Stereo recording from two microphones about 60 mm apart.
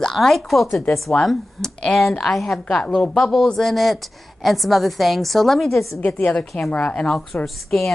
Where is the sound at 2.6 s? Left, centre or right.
Centre.